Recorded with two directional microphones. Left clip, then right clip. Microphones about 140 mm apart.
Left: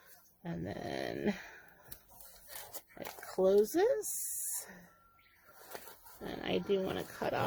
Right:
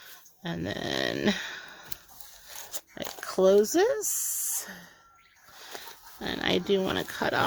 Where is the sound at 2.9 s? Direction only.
40° right (ahead or behind).